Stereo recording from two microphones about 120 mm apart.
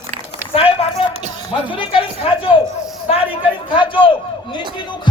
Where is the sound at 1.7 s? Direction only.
45° left (ahead or behind).